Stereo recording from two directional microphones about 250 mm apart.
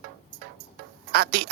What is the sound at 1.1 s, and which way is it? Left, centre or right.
Speech, right.